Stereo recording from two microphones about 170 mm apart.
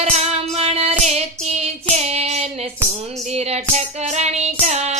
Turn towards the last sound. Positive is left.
turn(degrees=-40)  # may be behind; listen again after turning